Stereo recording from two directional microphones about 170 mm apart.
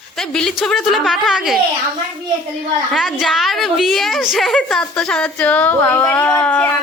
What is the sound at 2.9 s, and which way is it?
A woman's voice, centre (ahead or behind).